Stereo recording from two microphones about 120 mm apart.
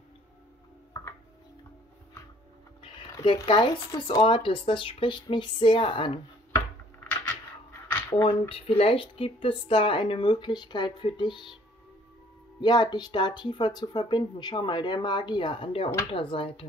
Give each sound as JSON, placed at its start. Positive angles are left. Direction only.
{"t": 2.8, "sound": "a sound", "side_deg": 40}
{"t": 3.4, "sound": "speech", "side_deg": 40}
{"t": 8.1, "sound": "speech", "side_deg": 45}
{"t": 12.5, "sound": "speech", "side_deg": 40}